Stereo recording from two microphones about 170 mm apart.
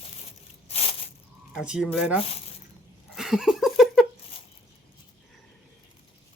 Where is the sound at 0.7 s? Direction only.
35° left (ahead or behind).